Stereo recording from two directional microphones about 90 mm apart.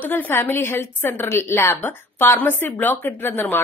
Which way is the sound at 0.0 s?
20° left (ahead or behind).